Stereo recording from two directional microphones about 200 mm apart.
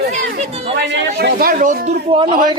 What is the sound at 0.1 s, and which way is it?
Chatter, 30° right (ahead or behind).